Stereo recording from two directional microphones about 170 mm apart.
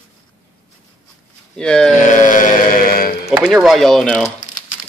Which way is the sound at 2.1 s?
50° left (ahead or behind).